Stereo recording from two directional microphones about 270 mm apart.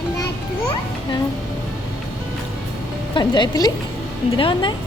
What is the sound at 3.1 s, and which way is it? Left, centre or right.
Speech, centre.